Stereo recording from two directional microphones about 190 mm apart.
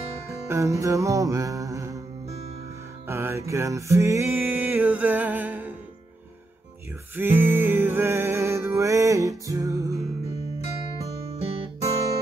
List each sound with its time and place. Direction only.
0.5 s music: 15° right (ahead or behind)
3.1 s music: 15° right (ahead or behind)
7.2 s music: 10° right (ahead or behind)
11.0 s music: 35° right (ahead or behind)